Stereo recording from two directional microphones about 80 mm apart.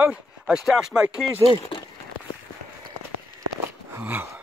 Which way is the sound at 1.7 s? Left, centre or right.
Left.